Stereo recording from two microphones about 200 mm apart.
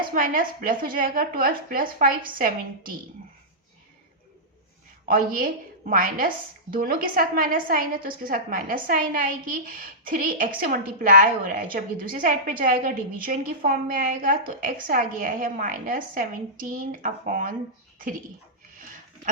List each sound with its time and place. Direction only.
0.1 s a woman's voice: 45° right (ahead or behind)
5.0 s a woman's voice: 45° right (ahead or behind)